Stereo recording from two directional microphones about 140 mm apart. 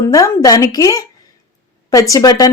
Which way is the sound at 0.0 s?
25° left (ahead or behind).